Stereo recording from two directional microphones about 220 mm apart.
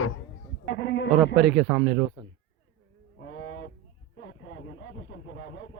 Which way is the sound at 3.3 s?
55° left (ahead or behind).